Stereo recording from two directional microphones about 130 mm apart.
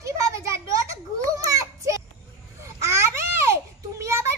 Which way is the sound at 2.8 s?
20° right (ahead or behind).